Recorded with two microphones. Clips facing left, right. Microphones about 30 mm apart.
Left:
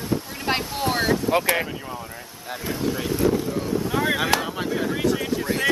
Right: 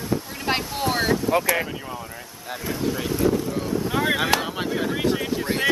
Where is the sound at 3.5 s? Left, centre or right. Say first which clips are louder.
Even; centre.